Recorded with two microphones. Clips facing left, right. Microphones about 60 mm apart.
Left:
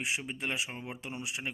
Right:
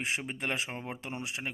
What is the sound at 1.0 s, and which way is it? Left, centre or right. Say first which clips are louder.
Speech: left 2 dB; right.